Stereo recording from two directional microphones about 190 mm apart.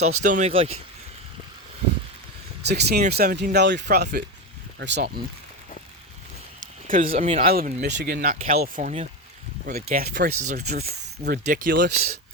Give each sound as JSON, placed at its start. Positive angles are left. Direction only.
{"t": 0.0, "sound": "speech", "side_deg": -40}
{"t": 2.6, "sound": "speech", "side_deg": -60}
{"t": 6.8, "sound": "speech", "side_deg": -45}
{"t": 8.1, "sound": "speech", "side_deg": -50}
{"t": 11.2, "sound": "speech", "side_deg": -45}